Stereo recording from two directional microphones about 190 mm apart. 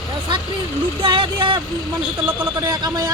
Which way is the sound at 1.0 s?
25° right (ahead or behind).